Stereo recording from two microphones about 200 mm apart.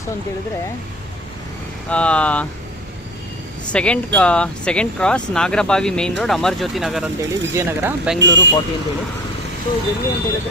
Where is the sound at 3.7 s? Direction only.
5° left (ahead or behind); by 8.2 s 10° right (ahead or behind).